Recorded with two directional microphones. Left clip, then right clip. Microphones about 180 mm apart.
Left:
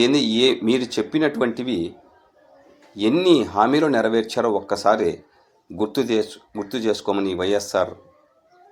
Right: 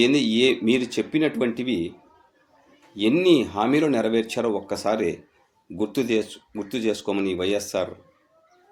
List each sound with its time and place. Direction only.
0.0 s speech: 20° right (ahead or behind)
3.0 s a man's voice: 20° right (ahead or behind)